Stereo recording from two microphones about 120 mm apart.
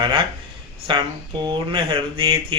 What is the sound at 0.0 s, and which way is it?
Speech, 45° right (ahead or behind).